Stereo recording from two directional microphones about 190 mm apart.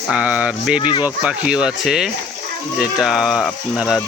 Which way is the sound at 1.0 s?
5° right (ahead or behind).